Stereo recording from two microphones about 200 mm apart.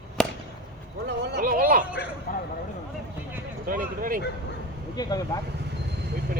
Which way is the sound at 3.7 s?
45° right (ahead or behind).